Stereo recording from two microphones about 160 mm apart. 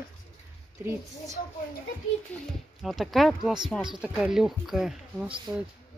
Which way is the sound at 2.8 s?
Centre (ahead or behind).